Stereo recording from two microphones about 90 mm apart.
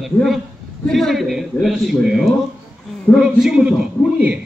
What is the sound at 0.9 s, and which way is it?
A man's voice, centre (ahead or behind).